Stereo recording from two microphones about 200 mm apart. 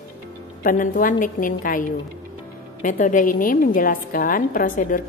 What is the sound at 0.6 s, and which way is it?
A woman's voice, 45° left (ahead or behind).